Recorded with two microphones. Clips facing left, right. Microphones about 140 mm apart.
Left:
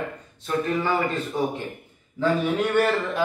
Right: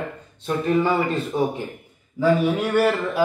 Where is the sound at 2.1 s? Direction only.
10° right (ahead or behind).